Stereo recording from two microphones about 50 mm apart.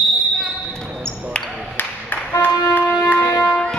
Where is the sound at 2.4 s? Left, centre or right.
Left.